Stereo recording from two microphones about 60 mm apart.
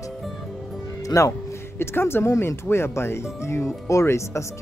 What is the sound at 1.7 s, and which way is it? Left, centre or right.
Speech, left.